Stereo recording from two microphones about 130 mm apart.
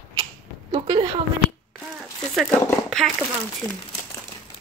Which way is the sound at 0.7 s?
35° right (ahead or behind).